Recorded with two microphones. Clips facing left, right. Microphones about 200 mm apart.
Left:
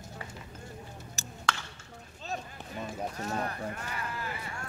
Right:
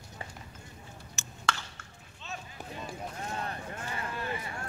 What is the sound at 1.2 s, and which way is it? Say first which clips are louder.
Chop: left 4 dB; 35° left (ahead or behind).